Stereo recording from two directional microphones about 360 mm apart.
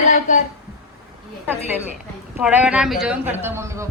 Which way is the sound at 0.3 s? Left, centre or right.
Centre.